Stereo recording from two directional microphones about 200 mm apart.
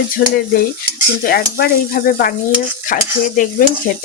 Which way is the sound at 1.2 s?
50° left (ahead or behind).